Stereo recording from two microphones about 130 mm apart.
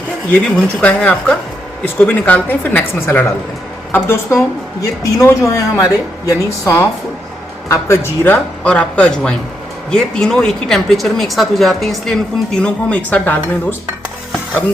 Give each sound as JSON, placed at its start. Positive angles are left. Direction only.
{"t": 0.3, "sound": "a woman's voice", "side_deg": 10}
{"t": 7.7, "sound": "speech", "side_deg": 20}